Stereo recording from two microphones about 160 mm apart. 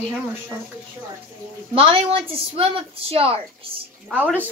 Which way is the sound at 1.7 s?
35° right (ahead or behind).